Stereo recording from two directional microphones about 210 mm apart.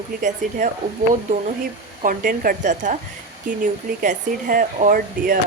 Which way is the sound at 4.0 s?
40° right (ahead or behind).